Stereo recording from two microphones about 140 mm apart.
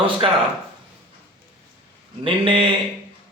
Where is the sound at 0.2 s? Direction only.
40° right (ahead or behind).